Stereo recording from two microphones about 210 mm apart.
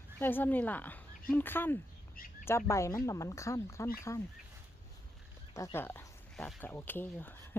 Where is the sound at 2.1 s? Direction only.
45° left (ahead or behind).